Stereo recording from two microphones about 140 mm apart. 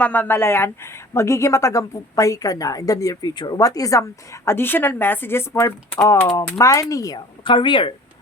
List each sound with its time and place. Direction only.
0.0 s a woman's voice: 10° left (ahead or behind)
7.4 s speech: 35° left (ahead or behind)